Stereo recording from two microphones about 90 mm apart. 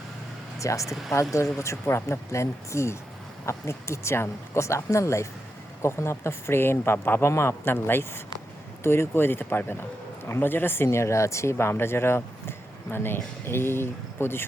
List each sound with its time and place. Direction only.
0.6 s speech: 35° left (ahead or behind)